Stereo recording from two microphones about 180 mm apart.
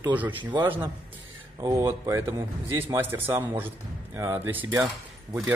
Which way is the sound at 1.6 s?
20° right (ahead or behind).